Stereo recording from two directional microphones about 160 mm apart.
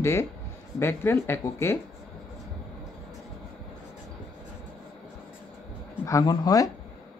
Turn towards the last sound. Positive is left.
turn(degrees=20)  # may be behind; listen again after turning